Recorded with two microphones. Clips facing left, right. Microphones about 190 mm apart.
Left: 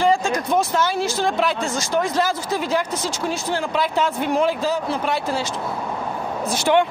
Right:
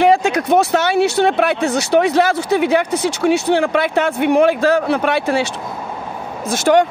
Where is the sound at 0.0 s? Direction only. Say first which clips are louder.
Right 5 dB; 65° right (ahead or behind).